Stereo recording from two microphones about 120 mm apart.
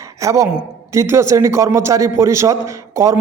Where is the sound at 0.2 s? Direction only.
25° right (ahead or behind).